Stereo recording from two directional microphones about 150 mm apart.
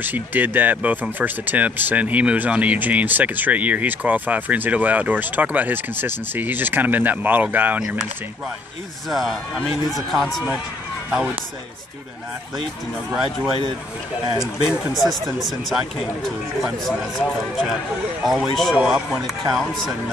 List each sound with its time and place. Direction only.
0.0 s speech: 10° right (ahead or behind)
9.1 s speech: centre (ahead or behind)
14.3 s speech: 5° right (ahead or behind)
18.2 s speech: 5° right (ahead or behind)